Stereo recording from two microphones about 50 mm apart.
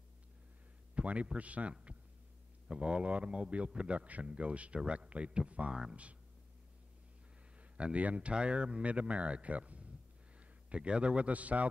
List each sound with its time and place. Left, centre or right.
0.9 s a man's voice: right
7.7 s a man's voice: right